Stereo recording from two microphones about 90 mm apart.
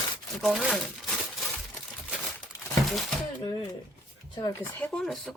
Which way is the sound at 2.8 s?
Centre (ahead or behind).